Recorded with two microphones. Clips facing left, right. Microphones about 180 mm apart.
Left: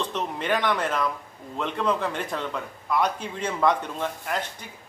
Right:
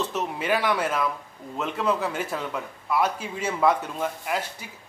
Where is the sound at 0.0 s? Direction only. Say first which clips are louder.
Right 1 dB; 5° right (ahead or behind).